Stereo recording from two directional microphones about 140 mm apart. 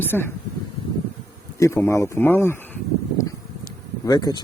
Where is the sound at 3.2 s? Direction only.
25° left (ahead or behind).